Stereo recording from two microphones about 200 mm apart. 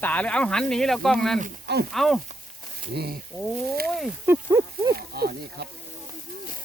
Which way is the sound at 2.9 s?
55° right (ahead or behind).